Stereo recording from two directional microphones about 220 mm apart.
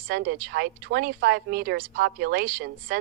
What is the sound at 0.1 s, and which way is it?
Speech, 45° right (ahead or behind).